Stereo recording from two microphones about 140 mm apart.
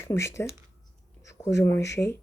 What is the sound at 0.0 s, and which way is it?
Speech, 20° left (ahead or behind).